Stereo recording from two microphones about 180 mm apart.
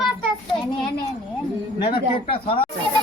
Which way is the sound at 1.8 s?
30° left (ahead or behind).